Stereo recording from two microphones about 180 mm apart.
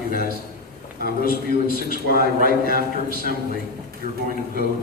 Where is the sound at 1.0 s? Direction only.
55° left (ahead or behind).